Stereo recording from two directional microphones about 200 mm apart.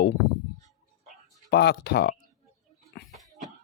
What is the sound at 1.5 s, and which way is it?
Speech, 55° left (ahead or behind).